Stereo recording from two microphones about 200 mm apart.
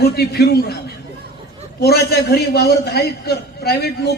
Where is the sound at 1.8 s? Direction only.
50° left (ahead or behind).